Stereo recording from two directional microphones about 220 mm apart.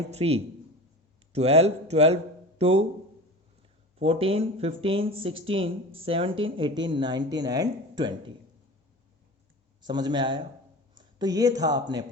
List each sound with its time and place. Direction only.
0.1 s speech: 25° right (ahead or behind)
3.9 s speech: 25° right (ahead or behind)
9.8 s speech: 20° right (ahead or behind)